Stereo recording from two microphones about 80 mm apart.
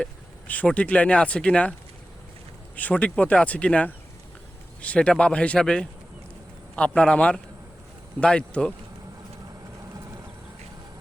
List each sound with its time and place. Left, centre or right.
0.0 s speech: centre
2.7 s speech: centre